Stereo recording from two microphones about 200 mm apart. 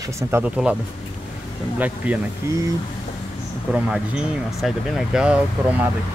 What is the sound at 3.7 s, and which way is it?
Speech, 5° right (ahead or behind).